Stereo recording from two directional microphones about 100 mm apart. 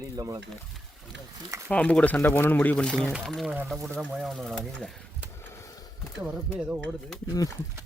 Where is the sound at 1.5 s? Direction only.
30° right (ahead or behind).